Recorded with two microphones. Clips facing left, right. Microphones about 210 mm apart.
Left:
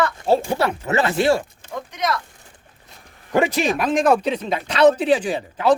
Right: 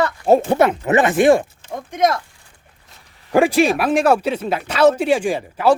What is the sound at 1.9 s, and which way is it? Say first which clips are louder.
Speech: right 7 dB; 50° right (ahead or behind).